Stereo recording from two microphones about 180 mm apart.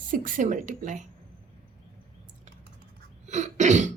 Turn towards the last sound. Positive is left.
turn(degrees=-40)  # may be behind; listen again after turning